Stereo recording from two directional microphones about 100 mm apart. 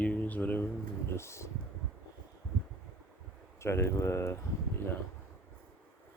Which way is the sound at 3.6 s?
25° left (ahead or behind).